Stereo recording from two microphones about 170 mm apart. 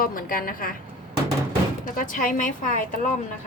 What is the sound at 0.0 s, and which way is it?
Speech, 55° left (ahead or behind).